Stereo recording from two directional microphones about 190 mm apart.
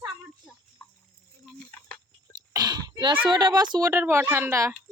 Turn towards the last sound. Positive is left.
turn(degrees=-15)  # may be behind; listen again after turning